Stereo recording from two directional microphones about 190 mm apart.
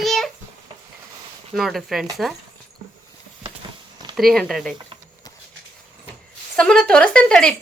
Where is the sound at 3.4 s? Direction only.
25° right (ahead or behind).